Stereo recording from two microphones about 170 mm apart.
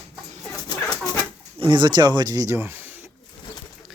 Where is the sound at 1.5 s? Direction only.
30° right (ahead or behind); by 3.1 s 10° right (ahead or behind).